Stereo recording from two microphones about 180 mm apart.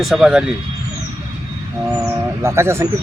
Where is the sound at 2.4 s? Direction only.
15° right (ahead or behind).